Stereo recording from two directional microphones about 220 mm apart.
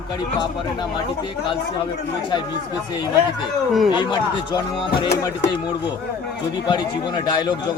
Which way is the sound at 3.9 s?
20° left (ahead or behind).